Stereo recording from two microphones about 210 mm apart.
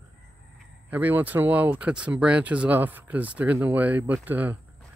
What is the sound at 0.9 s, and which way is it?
Speech, 10° right (ahead or behind).